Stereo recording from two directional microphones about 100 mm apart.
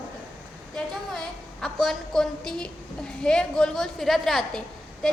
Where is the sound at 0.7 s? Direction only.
5° left (ahead or behind).